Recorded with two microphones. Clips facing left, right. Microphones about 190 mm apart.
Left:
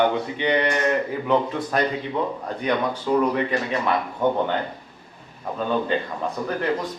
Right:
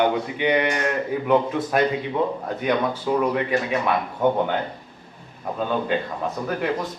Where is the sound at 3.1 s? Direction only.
10° right (ahead or behind).